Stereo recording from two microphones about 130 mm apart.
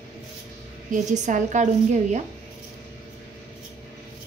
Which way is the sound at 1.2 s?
70° right (ahead or behind).